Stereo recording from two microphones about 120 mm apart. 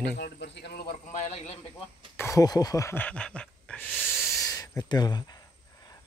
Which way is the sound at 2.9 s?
10° left (ahead or behind).